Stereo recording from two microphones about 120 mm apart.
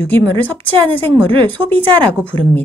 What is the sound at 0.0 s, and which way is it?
Speech, 15° left (ahead or behind).